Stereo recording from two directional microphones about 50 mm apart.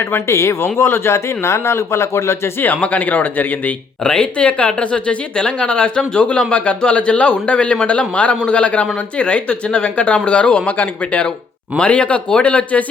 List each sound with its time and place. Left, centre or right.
0.0 s a man's voice: left
2.8 s a man's voice: left
4.0 s a man's voice: centre